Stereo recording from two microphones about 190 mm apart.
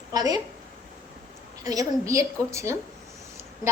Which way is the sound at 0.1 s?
20° right (ahead or behind).